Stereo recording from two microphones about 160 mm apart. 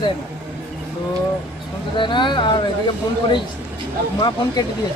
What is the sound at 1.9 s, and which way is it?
Speech, 30° left (ahead or behind).